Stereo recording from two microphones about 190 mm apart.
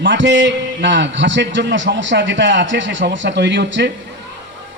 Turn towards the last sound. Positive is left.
turn(degrees=-65)  # may be behind; listen again after turning